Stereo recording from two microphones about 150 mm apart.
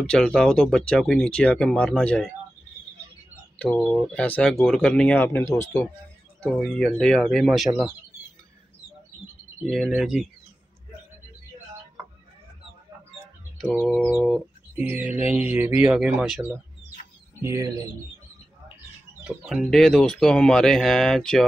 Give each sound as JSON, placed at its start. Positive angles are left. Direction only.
{"t": 0.0, "sound": "speech", "side_deg": 5}
{"t": 3.5, "sound": "speech", "side_deg": 5}
{"t": 6.4, "sound": "speech", "side_deg": 5}
{"t": 9.7, "sound": "speech", "side_deg": 0}
{"t": 13.8, "sound": "bird", "side_deg": 0}
{"t": 14.9, "sound": "speech", "side_deg": -10}
{"t": 17.4, "sound": "speech", "side_deg": -20}
{"t": 19.2, "sound": "speech", "side_deg": 0}